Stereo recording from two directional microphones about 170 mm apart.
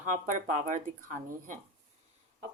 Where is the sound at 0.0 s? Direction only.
45° right (ahead or behind).